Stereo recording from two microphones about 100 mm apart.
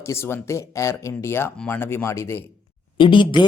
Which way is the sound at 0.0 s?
25° left (ahead or behind).